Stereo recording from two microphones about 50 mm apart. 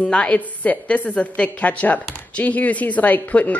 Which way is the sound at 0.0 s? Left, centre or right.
Left.